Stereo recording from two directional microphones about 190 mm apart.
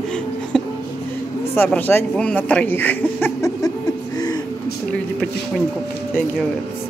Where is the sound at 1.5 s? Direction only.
10° left (ahead or behind).